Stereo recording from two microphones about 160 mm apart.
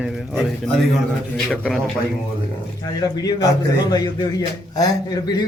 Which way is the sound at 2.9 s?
25° left (ahead or behind).